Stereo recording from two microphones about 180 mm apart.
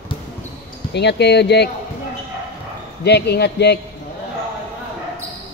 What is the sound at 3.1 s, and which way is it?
Speech, 65° left (ahead or behind).